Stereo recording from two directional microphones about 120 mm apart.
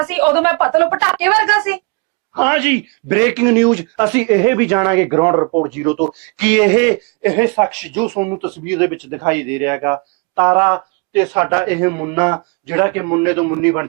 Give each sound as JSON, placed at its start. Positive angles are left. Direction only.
{"t": 0.0, "sound": "speech", "side_deg": -20}